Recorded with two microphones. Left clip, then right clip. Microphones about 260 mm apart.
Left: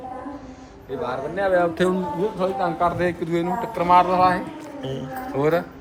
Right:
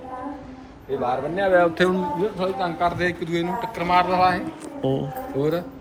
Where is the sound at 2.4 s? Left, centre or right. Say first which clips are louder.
Left 2 dB; left.